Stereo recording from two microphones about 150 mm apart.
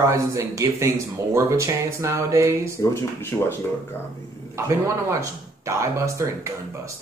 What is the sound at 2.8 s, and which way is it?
Speech, 15° left (ahead or behind).